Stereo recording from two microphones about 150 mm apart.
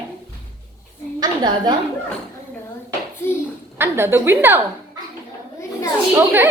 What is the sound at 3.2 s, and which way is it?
Speech, 15° left (ahead or behind).